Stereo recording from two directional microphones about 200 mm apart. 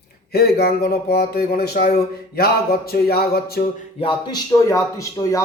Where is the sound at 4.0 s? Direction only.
20° left (ahead or behind).